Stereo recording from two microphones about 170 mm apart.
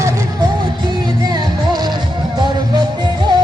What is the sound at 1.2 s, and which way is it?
Music, 25° right (ahead or behind).